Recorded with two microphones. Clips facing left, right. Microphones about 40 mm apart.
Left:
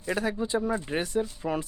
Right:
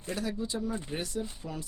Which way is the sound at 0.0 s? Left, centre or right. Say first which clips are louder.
Left 6 dB; left.